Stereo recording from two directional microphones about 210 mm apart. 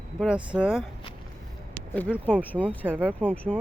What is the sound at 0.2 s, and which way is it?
Speech, 5° right (ahead or behind).